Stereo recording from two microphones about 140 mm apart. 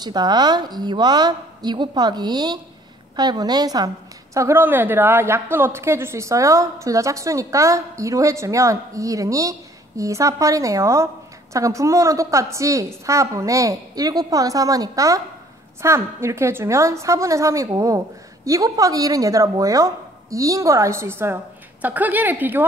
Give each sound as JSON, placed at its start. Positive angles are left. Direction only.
{"t": 0.0, "sound": "a woman's voice", "side_deg": -30}